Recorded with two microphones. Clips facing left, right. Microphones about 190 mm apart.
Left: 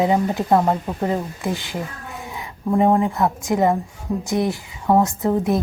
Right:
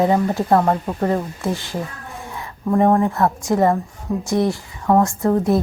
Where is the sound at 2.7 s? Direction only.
10° left (ahead or behind).